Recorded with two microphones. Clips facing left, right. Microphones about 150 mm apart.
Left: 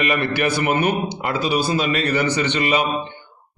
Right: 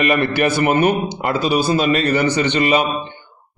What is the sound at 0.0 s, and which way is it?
A man's voice, 45° right (ahead or behind).